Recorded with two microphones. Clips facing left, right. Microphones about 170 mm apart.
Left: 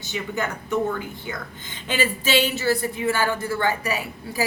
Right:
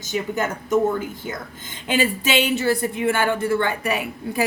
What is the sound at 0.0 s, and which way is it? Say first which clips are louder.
Speech: right 4 dB; 45° right (ahead or behind).